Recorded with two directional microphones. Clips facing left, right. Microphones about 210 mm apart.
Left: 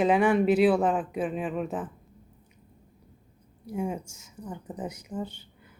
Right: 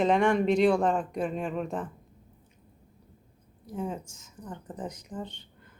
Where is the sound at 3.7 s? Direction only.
10° left (ahead or behind).